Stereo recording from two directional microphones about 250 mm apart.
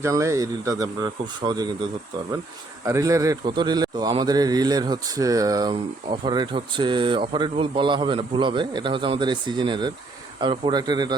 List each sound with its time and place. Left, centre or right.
0.0 s a man's voice: centre
2.8 s a man's voice: centre